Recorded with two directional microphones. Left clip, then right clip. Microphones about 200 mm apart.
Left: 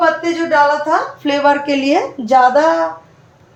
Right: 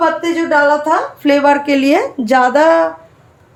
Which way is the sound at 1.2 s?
30° right (ahead or behind).